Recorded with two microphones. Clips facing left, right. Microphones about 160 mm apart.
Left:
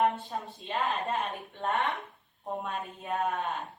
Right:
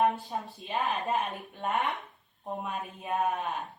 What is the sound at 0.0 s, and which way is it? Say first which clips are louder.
Speech: right 1 dB; centre (ahead or behind).